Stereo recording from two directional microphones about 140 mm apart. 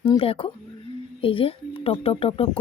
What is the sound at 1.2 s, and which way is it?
Speech, 40° left (ahead or behind).